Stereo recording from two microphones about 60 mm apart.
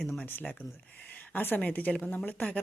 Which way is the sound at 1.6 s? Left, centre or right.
Left.